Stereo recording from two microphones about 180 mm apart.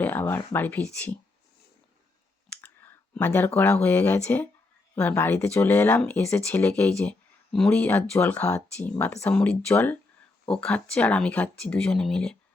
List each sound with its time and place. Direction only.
0.0 s speech: 10° left (ahead or behind)
2.6 s clicking: 10° left (ahead or behind)
3.8 s speech: 10° left (ahead or behind)